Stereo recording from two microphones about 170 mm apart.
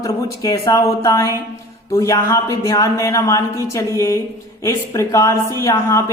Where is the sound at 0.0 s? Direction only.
20° left (ahead or behind).